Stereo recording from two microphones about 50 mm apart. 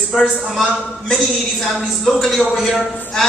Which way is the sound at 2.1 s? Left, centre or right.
Centre.